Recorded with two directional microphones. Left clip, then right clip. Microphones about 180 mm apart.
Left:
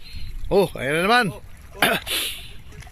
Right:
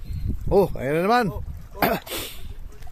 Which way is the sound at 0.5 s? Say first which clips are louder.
Even; 15° right (ahead or behind).